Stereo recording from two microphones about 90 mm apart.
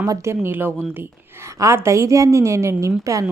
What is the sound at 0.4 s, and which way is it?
A woman's voice, 25° right (ahead or behind).